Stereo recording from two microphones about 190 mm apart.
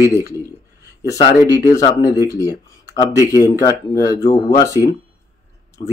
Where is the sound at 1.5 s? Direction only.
20° left (ahead or behind).